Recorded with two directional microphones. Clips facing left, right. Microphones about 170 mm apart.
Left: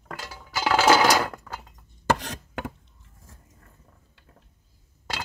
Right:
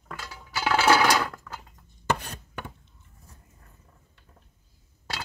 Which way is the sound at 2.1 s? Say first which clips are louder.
Left 4 dB; 90° left.